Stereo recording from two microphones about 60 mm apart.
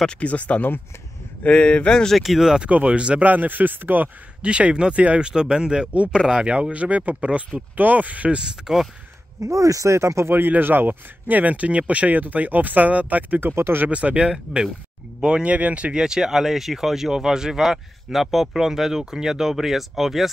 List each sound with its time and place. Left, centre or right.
0.0 s speech: centre
2.1 s speech: centre
2.7 s speech: right
4.4 s speech: centre
8.7 s speech: centre
9.4 s speech: right
10.3 s speech: right
13.4 s speech: right
13.8 s speech: right; by 20.2 s centre